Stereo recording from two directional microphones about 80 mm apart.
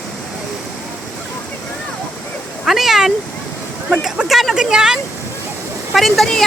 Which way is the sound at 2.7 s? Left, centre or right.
Centre.